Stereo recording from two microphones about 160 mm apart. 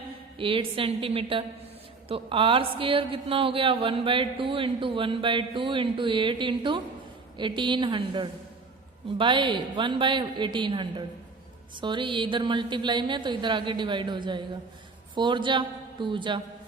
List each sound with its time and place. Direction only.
0.3 s a woman's voice: 35° right (ahead or behind)